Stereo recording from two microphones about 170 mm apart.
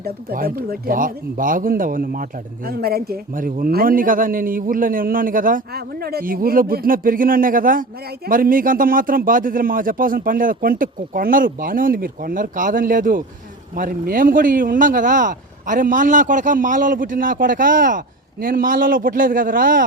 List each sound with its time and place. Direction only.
0.0 s a man's voice: 60° right (ahead or behind)